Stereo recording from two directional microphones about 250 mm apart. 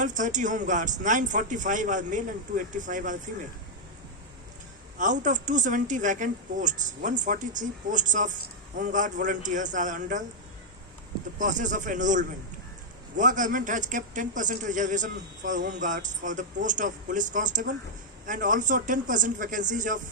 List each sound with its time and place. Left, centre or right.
0.0 s a woman's voice: right
4.9 s a woman's voice: right
11.3 s a woman's voice: right